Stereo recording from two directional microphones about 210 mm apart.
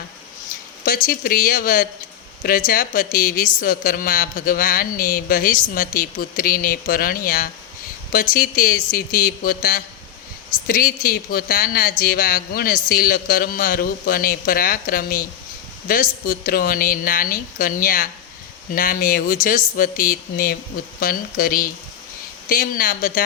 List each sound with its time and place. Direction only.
0.9 s a woman's voice: 45° left (ahead or behind)